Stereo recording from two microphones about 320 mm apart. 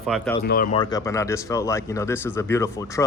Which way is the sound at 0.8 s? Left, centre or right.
Centre.